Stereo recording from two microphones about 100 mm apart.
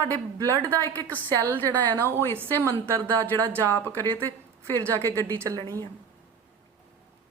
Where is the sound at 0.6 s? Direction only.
15° left (ahead or behind).